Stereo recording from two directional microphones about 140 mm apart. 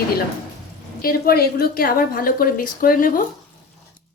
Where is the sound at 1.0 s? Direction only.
90° left.